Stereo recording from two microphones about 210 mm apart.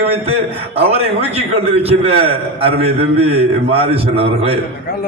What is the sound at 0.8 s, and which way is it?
A man's voice, 30° right (ahead or behind).